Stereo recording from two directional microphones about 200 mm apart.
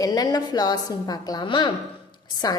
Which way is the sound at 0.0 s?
20° left (ahead or behind).